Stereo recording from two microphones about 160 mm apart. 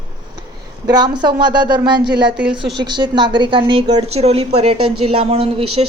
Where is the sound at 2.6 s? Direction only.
90° right.